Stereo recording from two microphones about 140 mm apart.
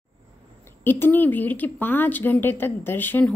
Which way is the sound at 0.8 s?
15° left (ahead or behind).